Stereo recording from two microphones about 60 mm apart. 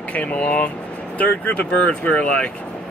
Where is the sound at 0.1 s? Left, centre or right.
Left.